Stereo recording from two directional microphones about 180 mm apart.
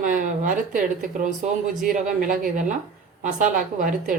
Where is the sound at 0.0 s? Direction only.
45° right (ahead or behind).